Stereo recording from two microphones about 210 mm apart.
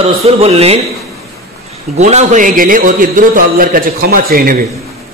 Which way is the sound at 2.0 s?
35° right (ahead or behind).